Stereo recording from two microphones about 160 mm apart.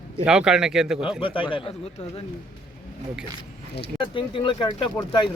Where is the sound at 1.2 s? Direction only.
35° left (ahead or behind).